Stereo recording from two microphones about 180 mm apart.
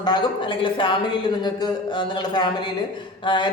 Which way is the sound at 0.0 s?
25° left (ahead or behind).